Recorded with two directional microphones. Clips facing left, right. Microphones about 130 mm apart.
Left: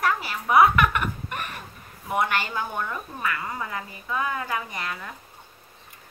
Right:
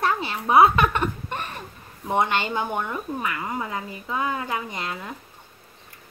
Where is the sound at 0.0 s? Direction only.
25° right (ahead or behind).